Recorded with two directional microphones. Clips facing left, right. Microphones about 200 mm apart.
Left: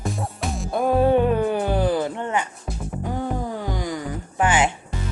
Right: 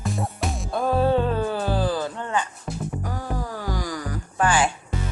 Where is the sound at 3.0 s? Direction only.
25° left (ahead or behind).